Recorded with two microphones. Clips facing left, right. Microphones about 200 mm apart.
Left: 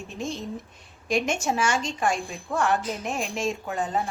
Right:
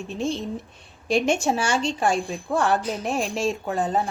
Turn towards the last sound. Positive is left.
turn(degrees=-35)  # may be behind; listen again after turning